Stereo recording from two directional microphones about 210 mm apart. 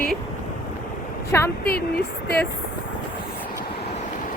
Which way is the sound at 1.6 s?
45° left (ahead or behind).